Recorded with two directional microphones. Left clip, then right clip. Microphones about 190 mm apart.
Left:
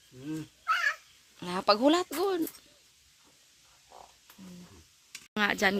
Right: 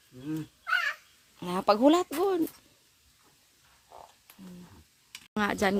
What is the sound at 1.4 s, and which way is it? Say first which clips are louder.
Speech: right 1 dB; 15° right (ahead or behind).